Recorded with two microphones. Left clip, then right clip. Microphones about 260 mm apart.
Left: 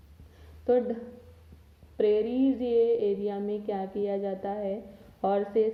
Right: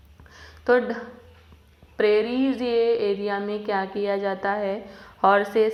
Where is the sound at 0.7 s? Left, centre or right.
Centre.